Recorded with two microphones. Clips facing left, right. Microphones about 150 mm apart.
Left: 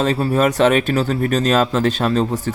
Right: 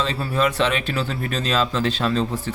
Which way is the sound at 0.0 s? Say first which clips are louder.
Left 6 dB; 45° left (ahead or behind).